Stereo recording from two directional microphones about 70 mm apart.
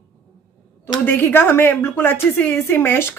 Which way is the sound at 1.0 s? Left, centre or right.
Left.